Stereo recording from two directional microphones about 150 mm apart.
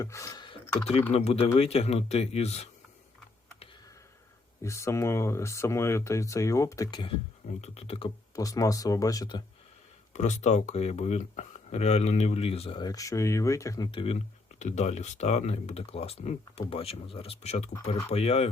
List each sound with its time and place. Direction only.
0.0 s speech: 20° left (ahead or behind)
1.1 s speech: 40° left (ahead or behind)
4.6 s speech: 20° left (ahead or behind)
7.6 s speech: 40° left (ahead or behind)
8.4 s speech: 25° left (ahead or behind)
10.1 s speech: 50° left (ahead or behind)
12.8 s speech: 25° left (ahead or behind)
14.6 s speech: 50° left (ahead or behind)